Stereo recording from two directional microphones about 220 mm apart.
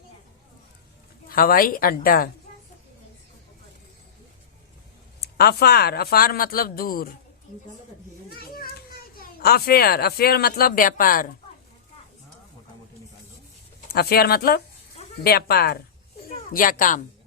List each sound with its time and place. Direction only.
1.3 s speech: 40° left (ahead or behind)
5.4 s speech: 45° left (ahead or behind)
8.4 s a child's voice: 40° left (ahead or behind)
13.8 s speech: 45° left (ahead or behind)